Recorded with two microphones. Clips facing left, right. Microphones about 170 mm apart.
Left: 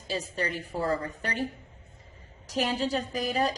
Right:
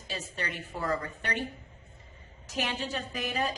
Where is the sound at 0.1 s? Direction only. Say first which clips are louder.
Left 6 dB; 35° left (ahead or behind).